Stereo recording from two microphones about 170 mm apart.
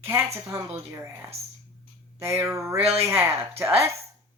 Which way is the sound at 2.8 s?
35° right (ahead or behind).